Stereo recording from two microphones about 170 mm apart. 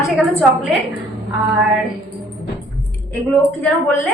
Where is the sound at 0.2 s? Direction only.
10° right (ahead or behind).